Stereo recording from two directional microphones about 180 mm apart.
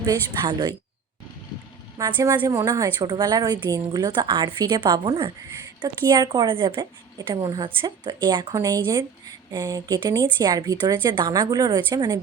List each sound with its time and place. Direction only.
0.0 s a woman's voice: 20° right (ahead or behind)
2.0 s a woman's voice: 20° right (ahead or behind)